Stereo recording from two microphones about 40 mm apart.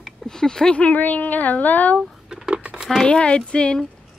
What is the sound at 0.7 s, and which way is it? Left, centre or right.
A woman's voice, left.